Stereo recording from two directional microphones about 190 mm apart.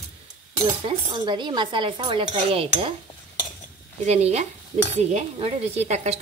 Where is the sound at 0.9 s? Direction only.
25° right (ahead or behind).